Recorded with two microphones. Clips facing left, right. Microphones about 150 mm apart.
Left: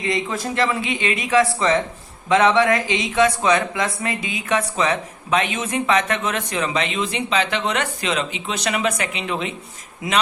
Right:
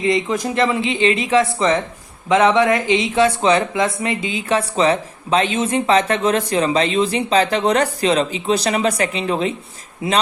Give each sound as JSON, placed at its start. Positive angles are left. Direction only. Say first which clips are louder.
{"t": 0.0, "sound": "a woman's voice", "louder": "right 5 dB", "side_deg": -20}